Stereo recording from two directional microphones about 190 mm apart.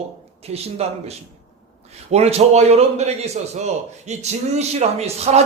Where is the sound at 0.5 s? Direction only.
35° right (ahead or behind).